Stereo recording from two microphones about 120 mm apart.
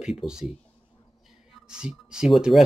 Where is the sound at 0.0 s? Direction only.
5° right (ahead or behind).